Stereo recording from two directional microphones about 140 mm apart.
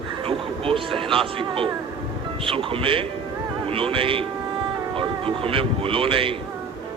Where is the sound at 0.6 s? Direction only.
40° right (ahead or behind).